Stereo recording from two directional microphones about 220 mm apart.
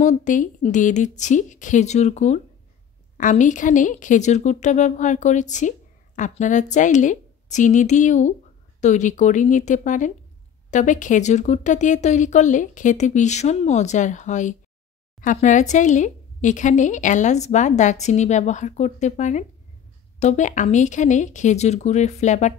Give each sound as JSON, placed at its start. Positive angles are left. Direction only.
{"t": 0.0, "sound": "a woman's voice", "side_deg": 35}